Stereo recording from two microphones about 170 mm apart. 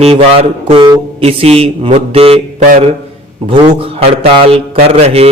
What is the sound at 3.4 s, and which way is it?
A man's voice, 30° right (ahead or behind).